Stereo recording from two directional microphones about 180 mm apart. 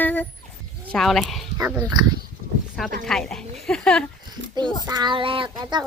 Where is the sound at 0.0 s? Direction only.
10° left (ahead or behind).